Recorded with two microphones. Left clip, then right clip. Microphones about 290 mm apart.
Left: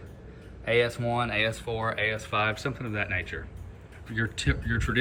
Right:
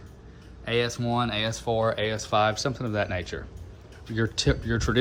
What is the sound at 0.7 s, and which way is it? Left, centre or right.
Speech, centre.